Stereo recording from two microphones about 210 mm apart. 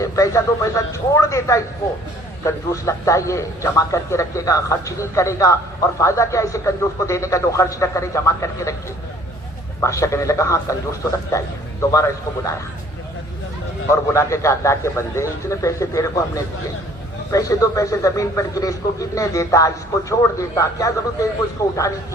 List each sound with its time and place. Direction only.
0.0 s a man's voice: 15° left (ahead or behind)
9.8 s a man's voice: 15° left (ahead or behind)
13.9 s a man's voice: 15° left (ahead or behind)